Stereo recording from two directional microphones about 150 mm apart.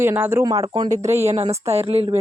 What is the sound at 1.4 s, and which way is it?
Speech, 45° right (ahead or behind).